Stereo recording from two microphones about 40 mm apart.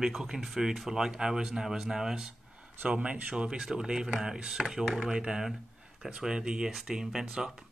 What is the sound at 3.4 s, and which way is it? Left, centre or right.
Speech, centre.